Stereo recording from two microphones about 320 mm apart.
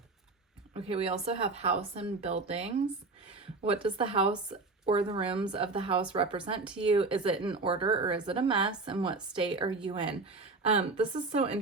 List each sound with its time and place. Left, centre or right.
0.7 s speech: centre
3.8 s speech: centre